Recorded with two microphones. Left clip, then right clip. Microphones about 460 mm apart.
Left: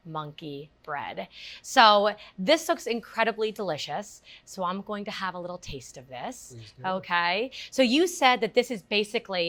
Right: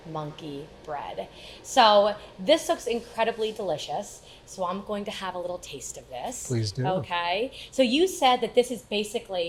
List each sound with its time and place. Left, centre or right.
0.1 s a woman's voice: left